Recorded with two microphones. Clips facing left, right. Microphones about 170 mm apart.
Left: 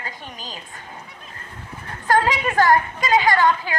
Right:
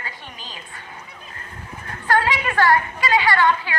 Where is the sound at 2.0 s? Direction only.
40° left (ahead or behind).